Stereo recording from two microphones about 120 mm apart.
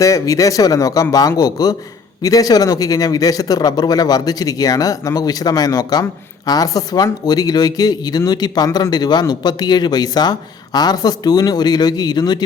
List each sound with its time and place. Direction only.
0.0 s a man's voice: 25° left (ahead or behind)